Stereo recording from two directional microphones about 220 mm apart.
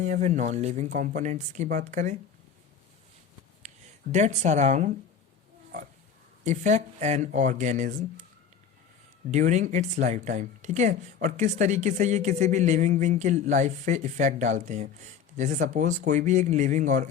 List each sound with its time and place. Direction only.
0.0 s speech: 35° right (ahead or behind)
4.1 s speech: 30° right (ahead or behind)
6.4 s speech: 35° right (ahead or behind)
9.3 s speech: 30° right (ahead or behind)